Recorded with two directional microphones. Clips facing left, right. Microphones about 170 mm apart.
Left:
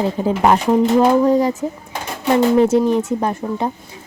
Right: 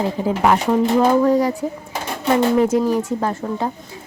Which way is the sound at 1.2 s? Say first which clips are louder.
Left 1 dB; 20° left (ahead or behind).